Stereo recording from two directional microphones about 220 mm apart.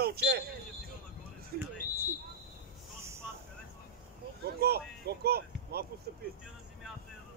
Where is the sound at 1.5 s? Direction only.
45° right (ahead or behind).